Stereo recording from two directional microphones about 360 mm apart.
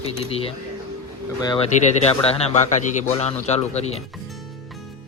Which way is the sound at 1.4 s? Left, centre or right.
Centre.